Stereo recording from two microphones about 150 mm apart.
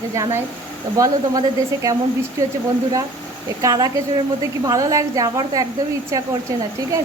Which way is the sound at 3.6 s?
25° right (ahead or behind).